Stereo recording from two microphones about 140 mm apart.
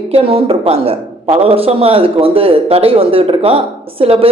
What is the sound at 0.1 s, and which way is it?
Speech, 45° right (ahead or behind).